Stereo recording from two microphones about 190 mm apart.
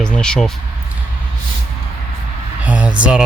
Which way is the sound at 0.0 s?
5° left (ahead or behind).